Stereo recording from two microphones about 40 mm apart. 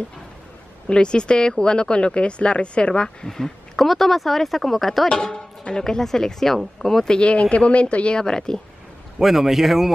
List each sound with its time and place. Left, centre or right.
0.8 s speech: left
3.3 s speech: centre
5.0 s speech: centre
7.2 s speech: left
9.2 s a man's voice: centre